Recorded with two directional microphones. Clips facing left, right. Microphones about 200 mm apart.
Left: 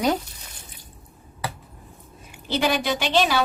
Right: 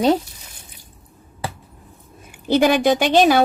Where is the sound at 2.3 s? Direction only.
50° right (ahead or behind).